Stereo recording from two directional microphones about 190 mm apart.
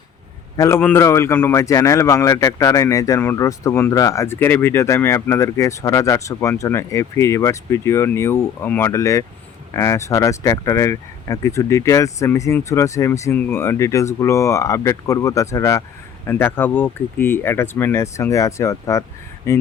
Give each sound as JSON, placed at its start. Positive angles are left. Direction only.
{"t": 0.5, "sound": "speech", "side_deg": 15}